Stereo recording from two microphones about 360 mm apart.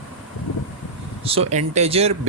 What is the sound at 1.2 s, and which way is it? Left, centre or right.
Speech, centre.